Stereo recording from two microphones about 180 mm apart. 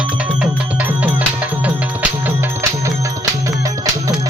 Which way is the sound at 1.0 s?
10° right (ahead or behind).